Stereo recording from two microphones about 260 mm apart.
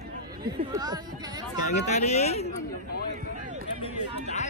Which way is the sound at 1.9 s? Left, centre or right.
Left.